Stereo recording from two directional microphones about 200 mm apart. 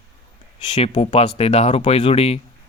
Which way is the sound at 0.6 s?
30° left (ahead or behind).